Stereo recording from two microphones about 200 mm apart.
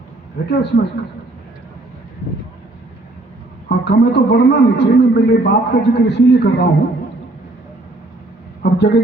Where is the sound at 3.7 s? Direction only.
55° left (ahead or behind).